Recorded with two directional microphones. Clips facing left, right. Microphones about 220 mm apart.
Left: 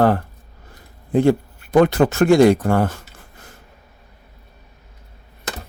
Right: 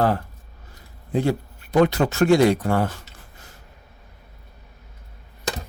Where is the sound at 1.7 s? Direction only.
50° left (ahead or behind).